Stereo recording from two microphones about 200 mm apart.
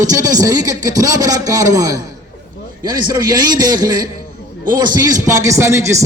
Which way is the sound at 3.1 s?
20° right (ahead or behind).